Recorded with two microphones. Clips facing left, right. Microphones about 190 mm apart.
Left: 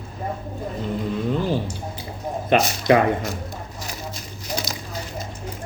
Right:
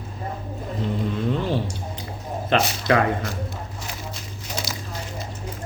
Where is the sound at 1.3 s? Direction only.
Centre (ahead or behind).